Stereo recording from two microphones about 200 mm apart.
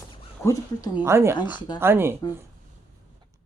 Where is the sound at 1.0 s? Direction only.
15° right (ahead or behind).